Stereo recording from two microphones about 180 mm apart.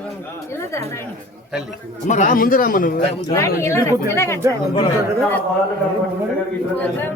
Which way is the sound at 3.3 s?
15° left (ahead or behind).